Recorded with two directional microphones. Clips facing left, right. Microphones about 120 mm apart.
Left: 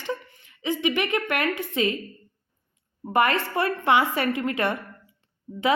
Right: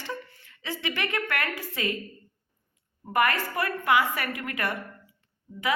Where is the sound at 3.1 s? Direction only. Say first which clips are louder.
Left 3 dB; 25° left (ahead or behind).